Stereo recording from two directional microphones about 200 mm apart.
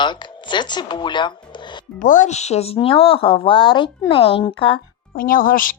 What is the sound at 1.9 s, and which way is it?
Speech, 40° left (ahead or behind).